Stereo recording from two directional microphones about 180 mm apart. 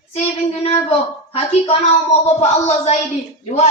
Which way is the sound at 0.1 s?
35° left (ahead or behind).